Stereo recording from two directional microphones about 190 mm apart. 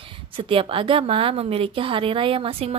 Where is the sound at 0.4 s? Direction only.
30° right (ahead or behind).